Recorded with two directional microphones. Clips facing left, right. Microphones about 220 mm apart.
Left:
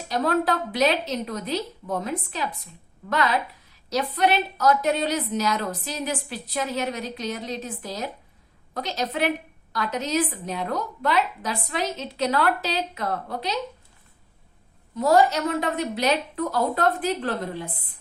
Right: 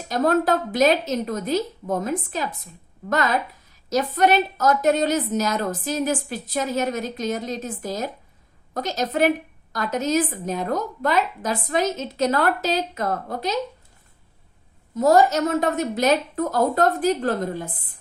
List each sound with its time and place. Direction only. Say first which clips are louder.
0.1 s a woman's voice: right 3 dB; 45° right (ahead or behind)
14.9 s a woman's voice: right 3 dB; 45° right (ahead or behind)